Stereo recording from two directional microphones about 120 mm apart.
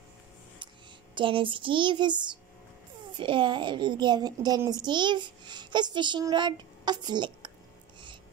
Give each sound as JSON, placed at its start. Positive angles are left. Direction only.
{"t": 1.1, "sound": "a child's voice", "side_deg": -45}